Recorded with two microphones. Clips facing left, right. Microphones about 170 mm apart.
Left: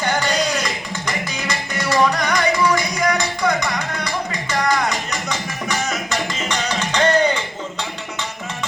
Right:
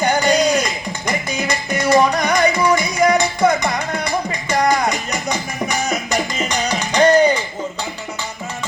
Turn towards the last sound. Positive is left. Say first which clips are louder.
# right 4 dB
turn(degrees=-10)  # may be behind; listen again after turning